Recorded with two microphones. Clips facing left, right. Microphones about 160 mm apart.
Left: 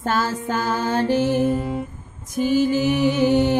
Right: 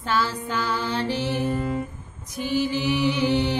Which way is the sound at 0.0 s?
45° left (ahead or behind).